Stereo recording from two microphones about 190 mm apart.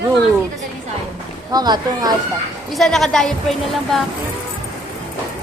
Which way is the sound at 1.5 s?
20° right (ahead or behind).